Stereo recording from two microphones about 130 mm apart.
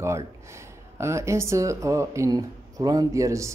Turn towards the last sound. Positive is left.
turn(degrees=-25)  # may be behind; listen again after turning